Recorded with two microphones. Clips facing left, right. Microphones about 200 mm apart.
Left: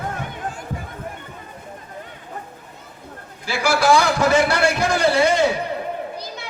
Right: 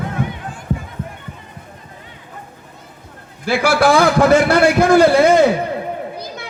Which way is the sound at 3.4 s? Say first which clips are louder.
Right 5 dB; 55° right (ahead or behind).